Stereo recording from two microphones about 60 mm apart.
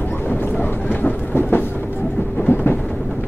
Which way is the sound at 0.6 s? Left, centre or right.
Left.